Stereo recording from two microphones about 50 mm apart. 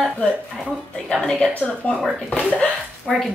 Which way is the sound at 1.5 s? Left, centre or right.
Left.